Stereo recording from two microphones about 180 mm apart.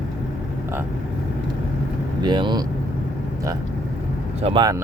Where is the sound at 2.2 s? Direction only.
25° right (ahead or behind).